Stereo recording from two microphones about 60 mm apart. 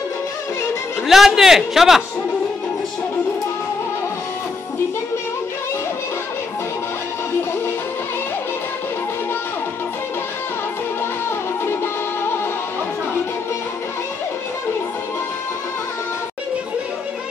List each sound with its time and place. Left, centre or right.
1.0 s a man's voice: centre
11.6 s music: left